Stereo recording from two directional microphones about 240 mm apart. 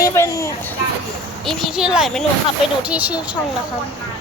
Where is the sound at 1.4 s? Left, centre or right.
Centre.